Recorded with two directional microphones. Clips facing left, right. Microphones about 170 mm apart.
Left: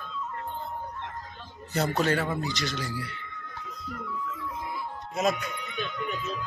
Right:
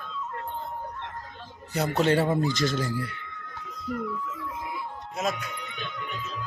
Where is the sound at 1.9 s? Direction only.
25° right (ahead or behind).